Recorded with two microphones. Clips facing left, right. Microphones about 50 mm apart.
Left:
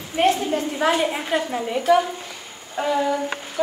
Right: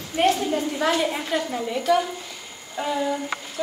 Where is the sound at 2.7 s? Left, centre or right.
Left.